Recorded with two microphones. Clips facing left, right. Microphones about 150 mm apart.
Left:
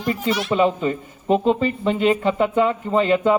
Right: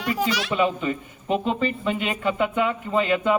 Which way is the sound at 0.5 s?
35° left (ahead or behind).